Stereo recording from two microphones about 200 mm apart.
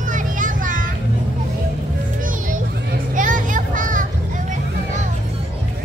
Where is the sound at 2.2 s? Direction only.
45° right (ahead or behind).